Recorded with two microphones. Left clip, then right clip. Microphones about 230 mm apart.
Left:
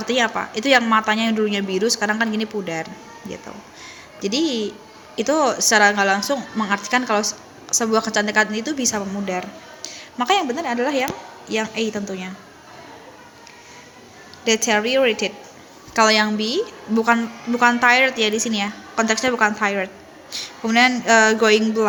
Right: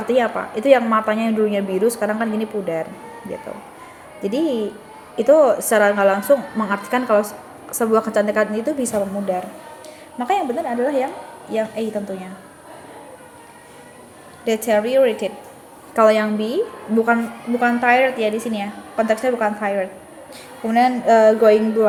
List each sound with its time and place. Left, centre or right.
0.1 s a woman's voice: centre
4.2 s a woman's voice: centre
14.4 s a woman's voice: centre
17.6 s a woman's voice: centre